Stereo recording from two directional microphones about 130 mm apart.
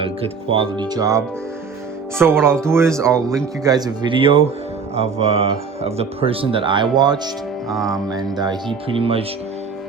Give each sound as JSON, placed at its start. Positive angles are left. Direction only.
{"t": 0.5, "sound": "speech", "side_deg": -40}